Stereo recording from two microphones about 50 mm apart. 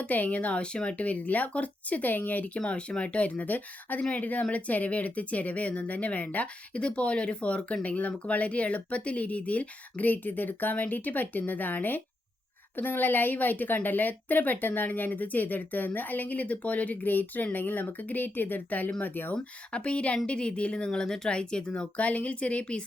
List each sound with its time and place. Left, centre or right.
0.0 s speech: left
2.5 s a woman's voice: left
19.0 s a woman's voice: left
19.3 s speech: left